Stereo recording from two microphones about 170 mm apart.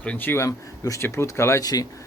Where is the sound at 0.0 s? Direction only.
10° left (ahead or behind).